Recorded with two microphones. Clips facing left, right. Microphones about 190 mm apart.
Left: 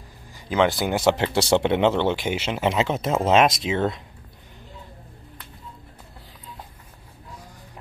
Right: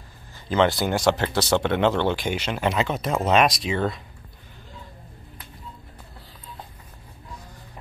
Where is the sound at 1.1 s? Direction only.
25° left (ahead or behind).